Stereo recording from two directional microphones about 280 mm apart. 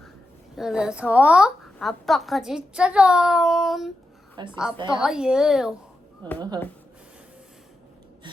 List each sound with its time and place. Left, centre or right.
0.5 s a woman's voice: centre
4.4 s a woman's voice: centre
4.9 s a woman's voice: centre
6.2 s a woman's voice: centre